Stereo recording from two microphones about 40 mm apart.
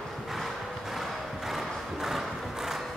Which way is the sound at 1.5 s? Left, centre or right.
Centre.